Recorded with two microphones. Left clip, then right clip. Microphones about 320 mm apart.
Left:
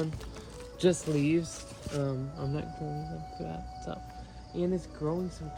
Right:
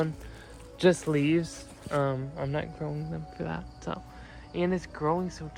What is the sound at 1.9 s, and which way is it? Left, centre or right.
Speech, centre.